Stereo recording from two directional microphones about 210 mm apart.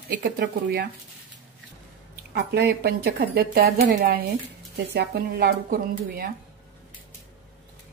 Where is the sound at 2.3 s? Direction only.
50° right (ahead or behind).